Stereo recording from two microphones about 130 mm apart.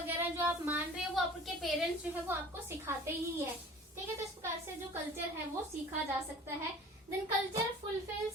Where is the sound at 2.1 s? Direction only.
15° right (ahead or behind).